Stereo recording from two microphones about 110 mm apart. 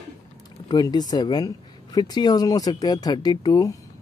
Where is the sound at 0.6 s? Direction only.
40° left (ahead or behind).